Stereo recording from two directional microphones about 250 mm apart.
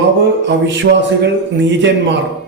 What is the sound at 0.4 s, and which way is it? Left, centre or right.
Speech, right.